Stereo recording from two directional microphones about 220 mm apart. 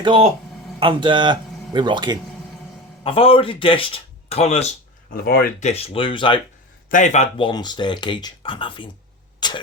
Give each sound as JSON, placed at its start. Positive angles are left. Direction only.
{"t": 0.0, "sound": "speech", "side_deg": -25}
{"t": 3.0, "sound": "speech", "side_deg": 25}
{"t": 5.1, "sound": "speech", "side_deg": 45}
{"t": 9.4, "sound": "clock", "side_deg": 20}